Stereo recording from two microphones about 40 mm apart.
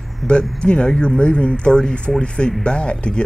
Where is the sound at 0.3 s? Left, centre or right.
Left.